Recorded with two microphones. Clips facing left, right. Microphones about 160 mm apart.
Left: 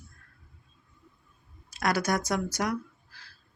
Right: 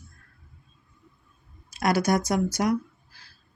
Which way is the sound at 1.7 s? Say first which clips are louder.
Right 4 dB; 10° right (ahead or behind).